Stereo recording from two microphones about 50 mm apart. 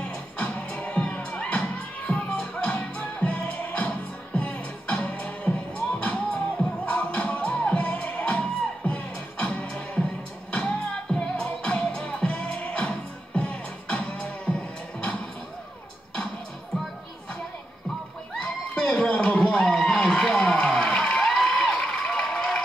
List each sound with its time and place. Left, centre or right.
0.0 s music: centre
1.0 s crowd: left
2.6 s music: left
18.3 s a sound: centre
20.8 s crowd: centre